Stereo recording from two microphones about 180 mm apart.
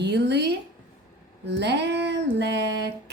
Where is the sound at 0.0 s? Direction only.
70° right (ahead or behind).